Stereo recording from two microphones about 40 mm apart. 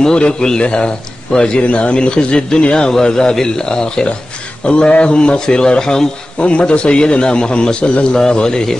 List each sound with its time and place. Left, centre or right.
0.0 s a man's voice: left
6.4 s a man's voice: left